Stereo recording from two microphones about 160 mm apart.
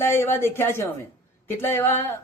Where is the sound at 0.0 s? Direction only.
15° left (ahead or behind).